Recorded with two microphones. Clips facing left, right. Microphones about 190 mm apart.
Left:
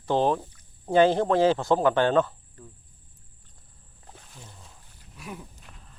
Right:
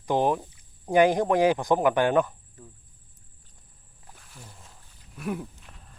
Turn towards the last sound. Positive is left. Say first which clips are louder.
# right 9 dB
turn(degrees=-55)  # may be behind; listen again after turning